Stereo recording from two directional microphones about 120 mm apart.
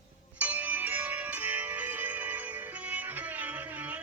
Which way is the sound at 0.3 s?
10° right (ahead or behind).